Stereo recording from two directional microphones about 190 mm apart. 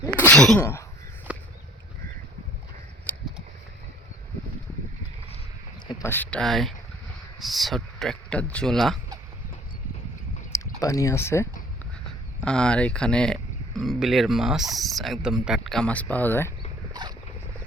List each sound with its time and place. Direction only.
0.3 s sneeze: 5° left (ahead or behind)
0.6 s speech: 15° left (ahead or behind)
1.3 s a sound: 5° right (ahead or behind)
5.9 s speech: 15° left (ahead or behind)
10.8 s speech: 15° left (ahead or behind)
12.5 s speech: 5° left (ahead or behind)
16.9 s dog: 20° right (ahead or behind)